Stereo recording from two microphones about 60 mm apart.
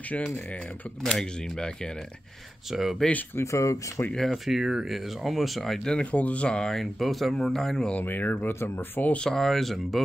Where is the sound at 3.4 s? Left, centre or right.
Left.